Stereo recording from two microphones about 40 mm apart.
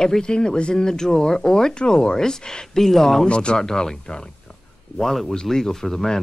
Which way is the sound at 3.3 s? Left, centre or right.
Left.